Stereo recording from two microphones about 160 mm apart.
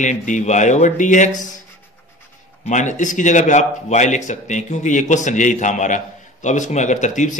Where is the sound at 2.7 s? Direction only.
50° left (ahead or behind).